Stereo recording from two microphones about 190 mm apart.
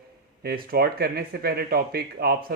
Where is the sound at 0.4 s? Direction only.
55° right (ahead or behind).